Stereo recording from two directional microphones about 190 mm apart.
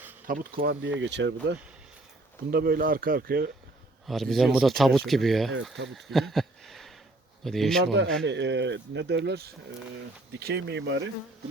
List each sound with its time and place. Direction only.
0.3 s speech: 50° right (ahead or behind)
0.9 s speech: 70° right (ahead or behind)
2.5 s speech: 55° right (ahead or behind)
4.0 s speech: centre (ahead or behind)
5.9 s a sound: centre (ahead or behind)
7.4 s speech: centre (ahead or behind)
8.2 s speech: 70° right (ahead or behind)
10.4 s speech: 65° right (ahead or behind)